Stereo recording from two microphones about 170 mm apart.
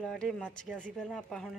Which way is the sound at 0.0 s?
5° left (ahead or behind).